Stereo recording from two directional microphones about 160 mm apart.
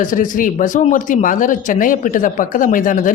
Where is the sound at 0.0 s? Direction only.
55° left (ahead or behind).